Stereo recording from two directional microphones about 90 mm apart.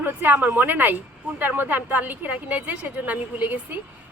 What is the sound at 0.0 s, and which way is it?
A man's voice, 20° right (ahead or behind).